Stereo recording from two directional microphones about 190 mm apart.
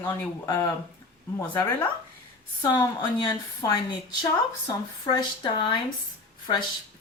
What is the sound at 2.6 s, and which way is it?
A woman's voice, 15° left (ahead or behind).